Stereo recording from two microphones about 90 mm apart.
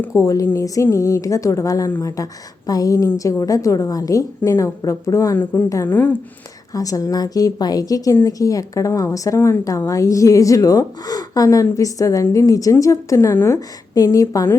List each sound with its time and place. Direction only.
0.2 s a woman's voice: 35° left (ahead or behind)
5.4 s speech: 20° left (ahead or behind)
5.6 s a woman's voice: 40° left (ahead or behind)
5.9 s a woman's voice: 15° left (ahead or behind)
6.7 s a woman's voice: 40° left (ahead or behind)